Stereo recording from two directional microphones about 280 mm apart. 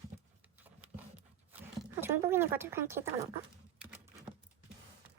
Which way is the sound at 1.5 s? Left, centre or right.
Centre.